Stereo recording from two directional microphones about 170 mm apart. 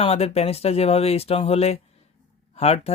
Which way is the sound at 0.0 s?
35° left (ahead or behind).